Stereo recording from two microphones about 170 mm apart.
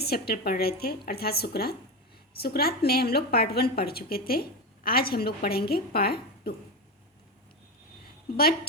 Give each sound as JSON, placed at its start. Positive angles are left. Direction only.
{"t": 0.0, "sound": "a woman's voice", "side_deg": 65}